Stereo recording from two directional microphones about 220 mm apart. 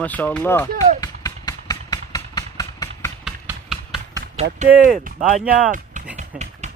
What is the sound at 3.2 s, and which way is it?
Music, centre (ahead or behind).